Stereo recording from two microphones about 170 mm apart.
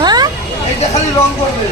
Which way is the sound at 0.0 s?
25° right (ahead or behind).